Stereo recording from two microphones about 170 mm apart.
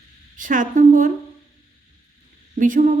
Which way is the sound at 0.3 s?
50° right (ahead or behind).